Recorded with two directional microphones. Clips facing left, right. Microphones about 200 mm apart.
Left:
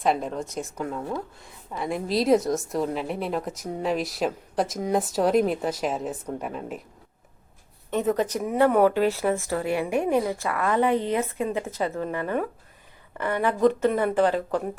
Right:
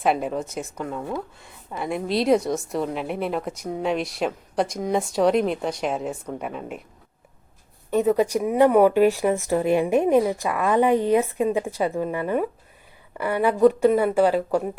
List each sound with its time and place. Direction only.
0.0 s a woman's voice: 5° right (ahead or behind)
7.9 s speech: 10° right (ahead or behind)